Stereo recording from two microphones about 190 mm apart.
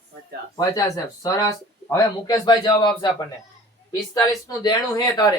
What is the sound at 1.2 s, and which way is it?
Speech, 15° left (ahead or behind).